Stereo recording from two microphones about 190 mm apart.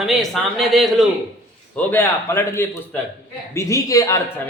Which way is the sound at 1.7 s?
10° left (ahead or behind).